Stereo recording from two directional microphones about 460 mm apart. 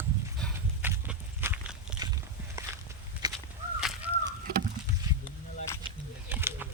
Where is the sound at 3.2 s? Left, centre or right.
Centre.